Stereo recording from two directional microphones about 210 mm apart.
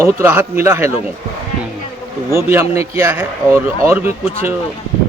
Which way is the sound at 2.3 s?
10° right (ahead or behind).